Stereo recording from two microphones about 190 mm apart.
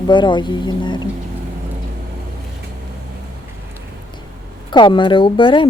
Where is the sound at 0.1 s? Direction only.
25° left (ahead or behind).